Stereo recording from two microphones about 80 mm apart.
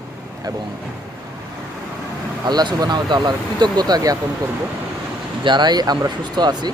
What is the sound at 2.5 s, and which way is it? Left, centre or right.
Speech, right.